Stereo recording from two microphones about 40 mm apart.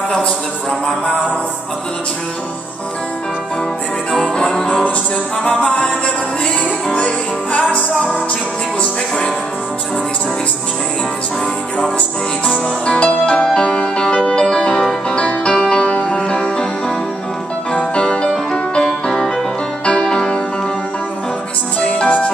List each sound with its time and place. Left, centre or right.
0.7 s music: centre
4.4 s music: centre
5.4 s music: left
6.9 s music: left
12.6 s music: left
17.7 s music: left
21.7 s music: left